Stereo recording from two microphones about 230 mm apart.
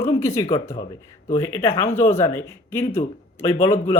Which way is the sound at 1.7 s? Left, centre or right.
Left.